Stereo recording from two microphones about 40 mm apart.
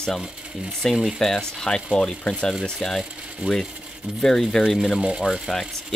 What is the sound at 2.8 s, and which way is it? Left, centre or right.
Speech, centre.